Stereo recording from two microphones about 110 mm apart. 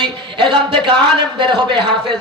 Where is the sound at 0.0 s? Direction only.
50° right (ahead or behind).